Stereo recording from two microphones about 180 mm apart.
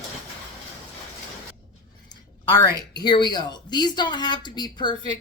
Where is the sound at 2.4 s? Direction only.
20° left (ahead or behind).